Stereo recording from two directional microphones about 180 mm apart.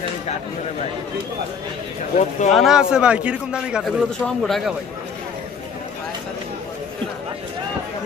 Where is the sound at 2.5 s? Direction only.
Centre (ahead or behind).